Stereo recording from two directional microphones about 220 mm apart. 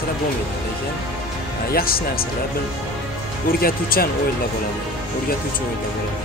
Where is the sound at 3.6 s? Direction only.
45° left (ahead or behind).